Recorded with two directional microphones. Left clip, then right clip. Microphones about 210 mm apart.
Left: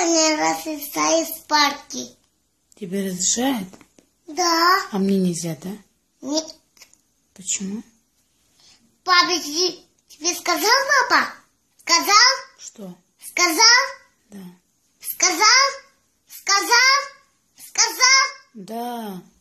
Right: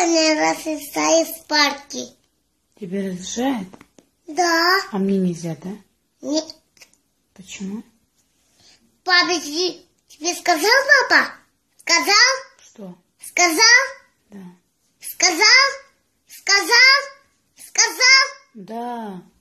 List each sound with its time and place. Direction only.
0.0 s a child's voice: 10° left (ahead or behind)
4.0 s a sound: 35° right (ahead or behind)
4.4 s a child's voice: 5° left (ahead or behind)
6.2 s a sound: 10° left (ahead or behind)
7.5 s a child's voice: 5° left (ahead or behind)
15.0 s a child's voice: 10° left (ahead or behind)